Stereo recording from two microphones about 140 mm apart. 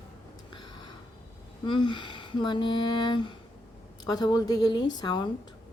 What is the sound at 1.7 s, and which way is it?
Speech, 35° left (ahead or behind).